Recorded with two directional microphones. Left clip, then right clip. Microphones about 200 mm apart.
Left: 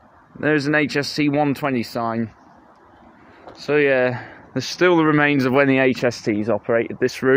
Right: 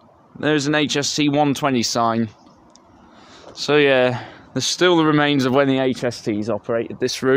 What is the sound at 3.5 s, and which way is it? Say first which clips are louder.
Speech: right 2 dB; 25° right (ahead or behind).